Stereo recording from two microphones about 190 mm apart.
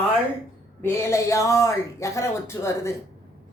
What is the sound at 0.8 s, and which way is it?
A woman's voice, 10° left (ahead or behind).